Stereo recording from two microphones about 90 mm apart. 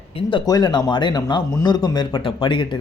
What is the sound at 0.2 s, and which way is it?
Speech, 65° left (ahead or behind).